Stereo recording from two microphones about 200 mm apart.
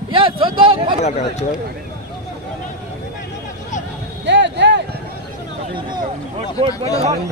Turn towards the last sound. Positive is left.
turn(degrees=-30)  # may be behind; listen again after turning